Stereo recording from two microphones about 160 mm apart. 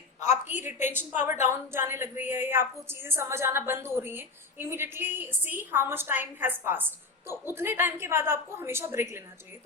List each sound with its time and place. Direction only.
0.2 s a woman's voice: 45° left (ahead or behind)
0.9 s a woman's voice: 15° right (ahead or behind)